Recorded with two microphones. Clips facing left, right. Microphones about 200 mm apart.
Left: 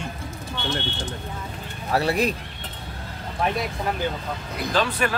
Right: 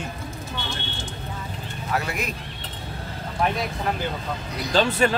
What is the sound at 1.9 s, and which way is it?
Speech, 35° left (ahead or behind).